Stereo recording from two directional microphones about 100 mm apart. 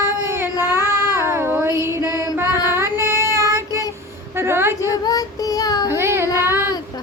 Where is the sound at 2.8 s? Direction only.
25° right (ahead or behind).